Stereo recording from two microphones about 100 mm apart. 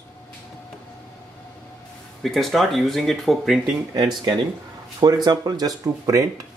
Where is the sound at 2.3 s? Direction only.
Centre (ahead or behind).